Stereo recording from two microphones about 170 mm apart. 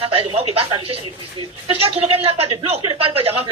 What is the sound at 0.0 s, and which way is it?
Speech, 35° right (ahead or behind).